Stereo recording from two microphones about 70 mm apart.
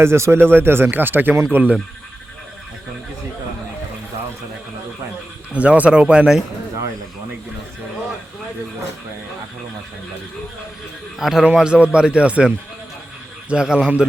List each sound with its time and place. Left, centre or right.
0.0 s speech: right
5.5 s speech: centre
11.2 s a man's voice: centre